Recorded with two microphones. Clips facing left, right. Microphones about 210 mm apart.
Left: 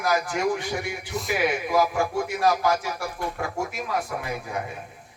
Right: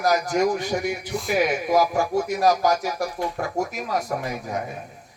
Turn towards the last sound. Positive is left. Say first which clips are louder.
# right 2 dB
turn(degrees=-40)  # may be behind; listen again after turning